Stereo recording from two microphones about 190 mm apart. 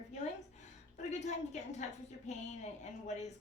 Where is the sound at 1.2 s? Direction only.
40° left (ahead or behind).